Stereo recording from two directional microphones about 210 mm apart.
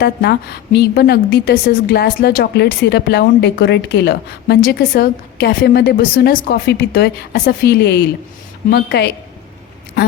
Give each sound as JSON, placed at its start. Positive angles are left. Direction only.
{"t": 0.0, "sound": "a woman's voice", "side_deg": 50}